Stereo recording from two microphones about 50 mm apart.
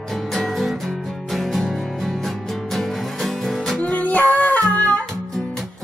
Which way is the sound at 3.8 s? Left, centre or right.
Left.